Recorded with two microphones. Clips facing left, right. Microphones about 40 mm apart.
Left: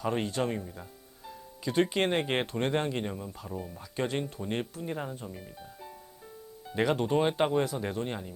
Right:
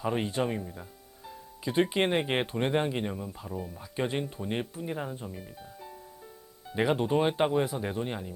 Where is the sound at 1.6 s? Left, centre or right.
Centre.